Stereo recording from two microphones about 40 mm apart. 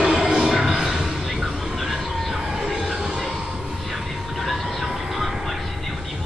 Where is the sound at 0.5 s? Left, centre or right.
Centre.